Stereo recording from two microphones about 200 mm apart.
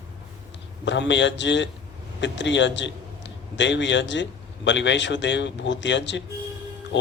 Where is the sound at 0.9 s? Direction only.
65° left (ahead or behind).